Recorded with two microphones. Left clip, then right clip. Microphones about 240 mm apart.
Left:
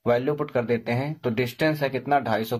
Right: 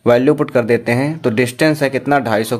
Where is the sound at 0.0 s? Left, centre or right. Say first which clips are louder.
Right 11 dB; right.